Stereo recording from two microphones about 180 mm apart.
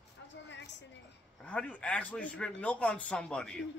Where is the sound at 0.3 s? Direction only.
80° left.